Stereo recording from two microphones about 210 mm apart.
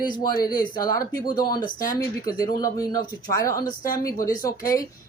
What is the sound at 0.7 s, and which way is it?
Speech, 20° left (ahead or behind).